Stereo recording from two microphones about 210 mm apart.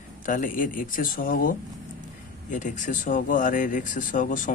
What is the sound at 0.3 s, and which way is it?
Speech, 40° left (ahead or behind).